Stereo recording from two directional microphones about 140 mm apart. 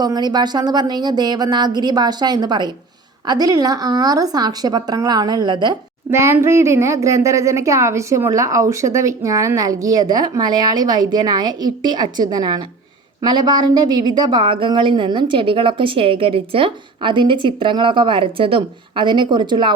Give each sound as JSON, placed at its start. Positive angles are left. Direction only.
{"t": 0.0, "sound": "a woman's voice", "side_deg": -30}
{"t": 6.1, "sound": "a woman's voice", "side_deg": -20}